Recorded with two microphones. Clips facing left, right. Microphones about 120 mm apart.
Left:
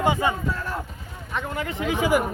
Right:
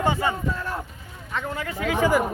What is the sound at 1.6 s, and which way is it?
Speech, 25° left (ahead or behind).